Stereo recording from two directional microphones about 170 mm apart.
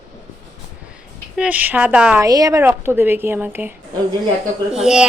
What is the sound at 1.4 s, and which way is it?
Speech, 10° right (ahead or behind).